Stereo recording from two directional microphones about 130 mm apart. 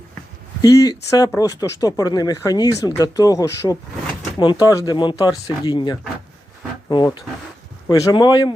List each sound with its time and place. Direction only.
0.6 s a man's voice: 30° left (ahead or behind)